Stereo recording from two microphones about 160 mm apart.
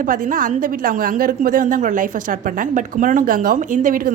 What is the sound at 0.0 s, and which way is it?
A woman's voice, 60° right (ahead or behind).